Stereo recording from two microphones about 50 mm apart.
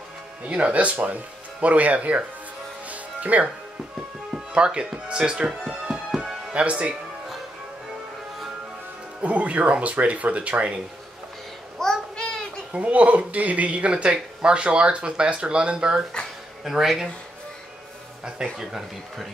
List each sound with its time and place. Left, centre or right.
0.5 s speech: right
2.9 s music: right
4.6 s speech: centre
5.5 s music: centre
6.6 s speech: right
9.2 s speech: right
11.8 s a sound: centre
12.7 s speech: right
16.6 s speech: centre
18.2 s speech: centre